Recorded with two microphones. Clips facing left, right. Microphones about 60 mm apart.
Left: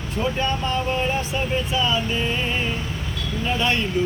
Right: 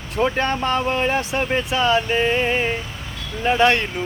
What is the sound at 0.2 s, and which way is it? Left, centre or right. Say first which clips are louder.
Speech: right 4 dB; right.